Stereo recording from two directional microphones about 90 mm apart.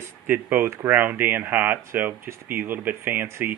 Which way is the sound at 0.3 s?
25° right (ahead or behind).